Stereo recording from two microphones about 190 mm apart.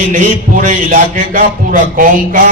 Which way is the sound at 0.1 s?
45° right (ahead or behind).